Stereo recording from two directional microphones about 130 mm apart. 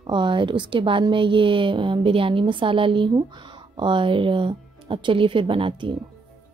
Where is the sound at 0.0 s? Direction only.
40° right (ahead or behind).